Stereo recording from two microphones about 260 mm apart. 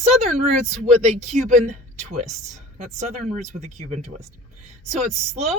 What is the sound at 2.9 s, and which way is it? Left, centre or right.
A woman's voice, right.